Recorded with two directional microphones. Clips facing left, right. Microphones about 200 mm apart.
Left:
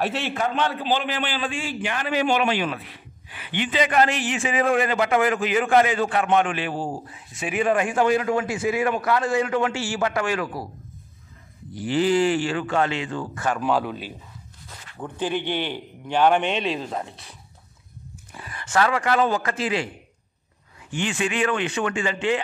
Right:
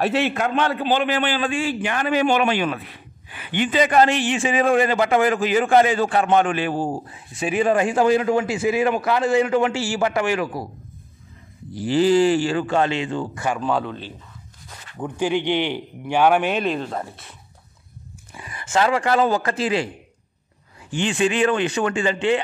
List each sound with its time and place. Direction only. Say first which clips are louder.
0.3 s a man's voice: right 3 dB; 65° right (ahead or behind); by 6.9 s 45° right (ahead or behind)
7.3 s a man's voice: right 3 dB; 30° right (ahead or behind)
11.7 s a man's voice: right 4 dB; 30° right (ahead or behind)
13.3 s a man's voice: right 1 dB; 10° right (ahead or behind)
13.6 s speech: even; 5° left (ahead or behind)
15.0 s a man's voice: right 4 dB; 15° right (ahead or behind)
18.3 s speech: right 2 dB; 15° right (ahead or behind); by 19.9 s 35° right (ahead or behind)
20.9 s a man's voice: right 5 dB; 30° right (ahead or behind)